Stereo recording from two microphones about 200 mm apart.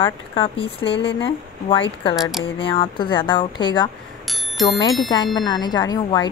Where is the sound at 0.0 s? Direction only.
25° left (ahead or behind).